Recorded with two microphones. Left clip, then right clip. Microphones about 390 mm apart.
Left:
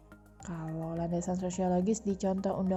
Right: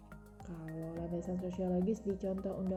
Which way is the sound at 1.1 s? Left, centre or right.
Left.